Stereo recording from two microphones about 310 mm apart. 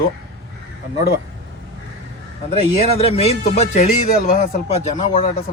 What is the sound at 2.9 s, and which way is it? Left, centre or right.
Speech, centre.